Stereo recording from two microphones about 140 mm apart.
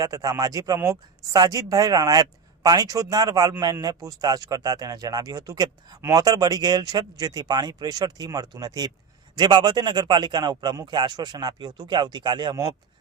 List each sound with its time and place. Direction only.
0.0 s a man's voice: 25° right (ahead or behind)